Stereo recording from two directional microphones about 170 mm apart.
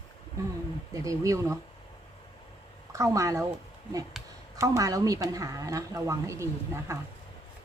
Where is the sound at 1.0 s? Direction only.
20° right (ahead or behind).